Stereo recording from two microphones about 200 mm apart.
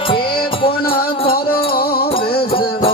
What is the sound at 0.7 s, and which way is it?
Music, 50° left (ahead or behind).